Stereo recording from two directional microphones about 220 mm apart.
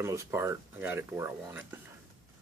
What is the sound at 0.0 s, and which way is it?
Speech, 15° right (ahead or behind).